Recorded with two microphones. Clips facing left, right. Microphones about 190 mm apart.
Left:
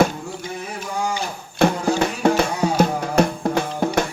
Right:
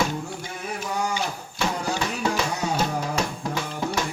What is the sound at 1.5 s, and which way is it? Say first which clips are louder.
Music: left 9 dB; 55° left (ahead or behind).